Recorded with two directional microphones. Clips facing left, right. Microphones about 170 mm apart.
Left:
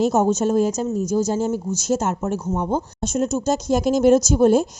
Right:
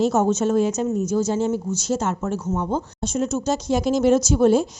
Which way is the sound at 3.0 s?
45° left (ahead or behind).